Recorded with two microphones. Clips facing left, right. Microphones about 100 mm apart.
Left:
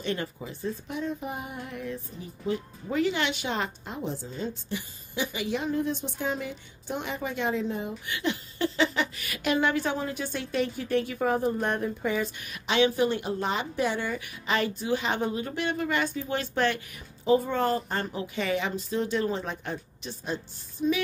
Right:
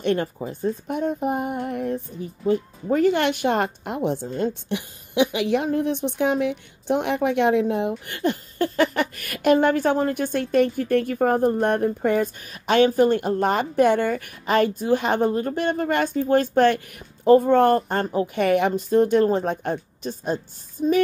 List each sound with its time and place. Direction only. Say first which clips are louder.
0.0 s speech: right 9 dB; 50° right (ahead or behind)